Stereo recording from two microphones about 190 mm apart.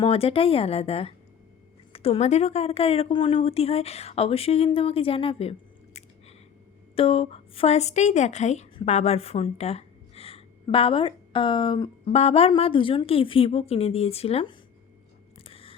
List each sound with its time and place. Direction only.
0.0 s speech: 30° left (ahead or behind)
6.9 s a woman's voice: 30° left (ahead or behind)
15.4 s a sound: 30° left (ahead or behind)